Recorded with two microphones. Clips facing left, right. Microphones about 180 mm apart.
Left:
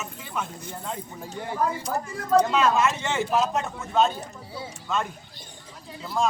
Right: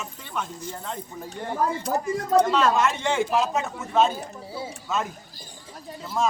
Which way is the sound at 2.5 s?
5° left (ahead or behind).